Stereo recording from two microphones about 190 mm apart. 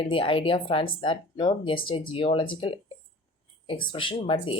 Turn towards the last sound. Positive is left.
turn(degrees=25)  # may be behind; listen again after turning